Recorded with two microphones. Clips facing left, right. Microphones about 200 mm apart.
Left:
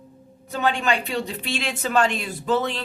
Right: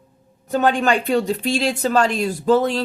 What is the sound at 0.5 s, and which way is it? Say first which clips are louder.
Speech: right 5 dB; 45° right (ahead or behind).